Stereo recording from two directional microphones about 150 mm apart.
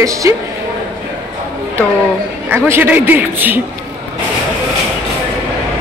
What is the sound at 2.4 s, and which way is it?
Speech, 15° right (ahead or behind).